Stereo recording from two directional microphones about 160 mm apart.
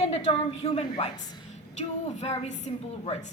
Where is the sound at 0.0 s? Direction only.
40° left (ahead or behind).